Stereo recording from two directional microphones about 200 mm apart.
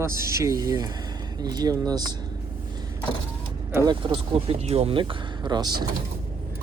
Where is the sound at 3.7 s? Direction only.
20° right (ahead or behind).